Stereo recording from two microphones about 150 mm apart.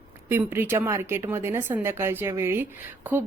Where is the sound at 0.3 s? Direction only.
15° right (ahead or behind).